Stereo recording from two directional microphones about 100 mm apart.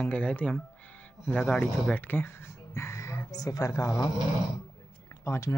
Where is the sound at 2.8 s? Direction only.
30° left (ahead or behind).